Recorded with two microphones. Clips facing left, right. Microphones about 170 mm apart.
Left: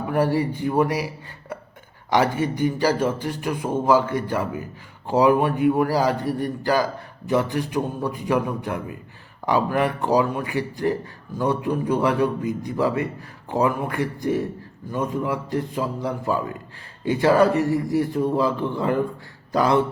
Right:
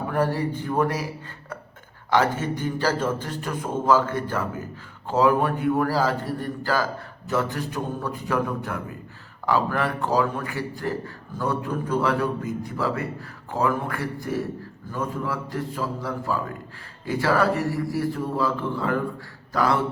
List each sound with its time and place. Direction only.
0.1 s speech: 10° left (ahead or behind)
2.0 s a man's voice: 15° left (ahead or behind)